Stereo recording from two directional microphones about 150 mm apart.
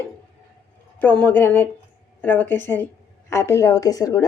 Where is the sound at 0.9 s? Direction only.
10° left (ahead or behind).